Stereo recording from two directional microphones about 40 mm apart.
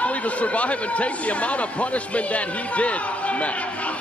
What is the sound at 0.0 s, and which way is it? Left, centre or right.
Speech, left.